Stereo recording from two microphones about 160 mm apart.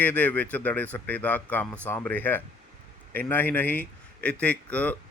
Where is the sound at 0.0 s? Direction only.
10° left (ahead or behind).